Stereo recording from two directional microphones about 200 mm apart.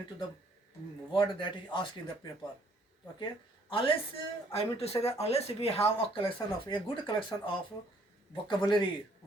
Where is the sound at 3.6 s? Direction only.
25° left (ahead or behind).